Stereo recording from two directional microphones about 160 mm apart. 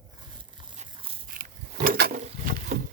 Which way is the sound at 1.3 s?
60° right (ahead or behind).